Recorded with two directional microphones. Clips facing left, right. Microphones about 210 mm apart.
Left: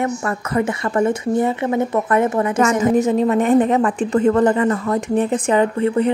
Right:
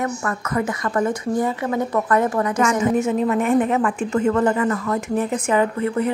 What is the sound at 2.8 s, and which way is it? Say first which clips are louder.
Speech: left 3 dB; 35° left (ahead or behind).